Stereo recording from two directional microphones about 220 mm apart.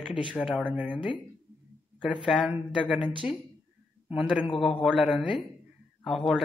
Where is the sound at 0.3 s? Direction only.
5° left (ahead or behind).